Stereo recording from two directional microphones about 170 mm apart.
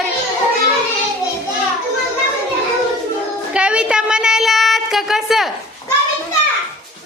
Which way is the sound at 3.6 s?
5° right (ahead or behind).